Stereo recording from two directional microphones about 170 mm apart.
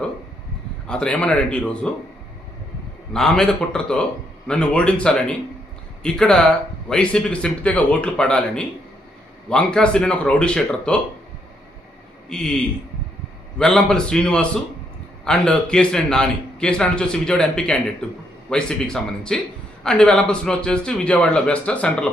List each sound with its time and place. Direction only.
0.9 s speech: 5° left (ahead or behind)
3.1 s speech: 5° left (ahead or behind)
12.3 s speech: 5° left (ahead or behind)
13.6 s speech: 5° left (ahead or behind)